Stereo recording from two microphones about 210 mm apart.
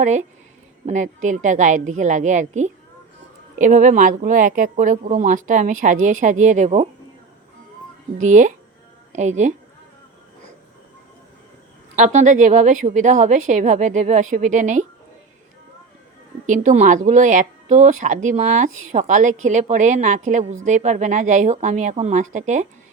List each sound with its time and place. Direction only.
0.0 s a woman's voice: 35° right (ahead or behind)
8.2 s a woman's voice: 35° right (ahead or behind)
11.9 s a woman's voice: 35° right (ahead or behind)
16.5 s a woman's voice: 35° right (ahead or behind)